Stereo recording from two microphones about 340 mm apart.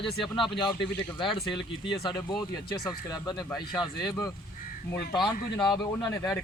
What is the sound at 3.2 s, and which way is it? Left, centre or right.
Speech, centre.